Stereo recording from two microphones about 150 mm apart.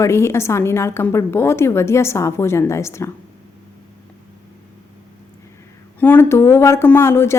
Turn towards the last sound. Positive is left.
turn(degrees=15)  # may be behind; listen again after turning